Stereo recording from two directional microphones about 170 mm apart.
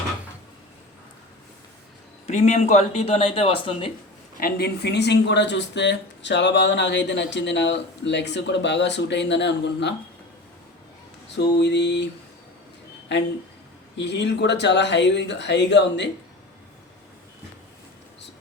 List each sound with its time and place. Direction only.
2.2 s a man's voice: 40° left (ahead or behind)
4.4 s speech: 65° left (ahead or behind); by 9.9 s 90° left
11.3 s speech: 90° left
13.1 s speech: 90° left